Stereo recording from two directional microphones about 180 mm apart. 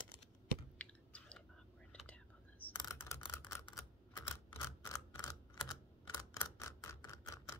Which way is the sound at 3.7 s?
15° left (ahead or behind).